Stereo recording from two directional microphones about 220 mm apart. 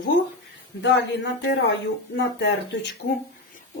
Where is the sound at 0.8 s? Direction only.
50° left (ahead or behind).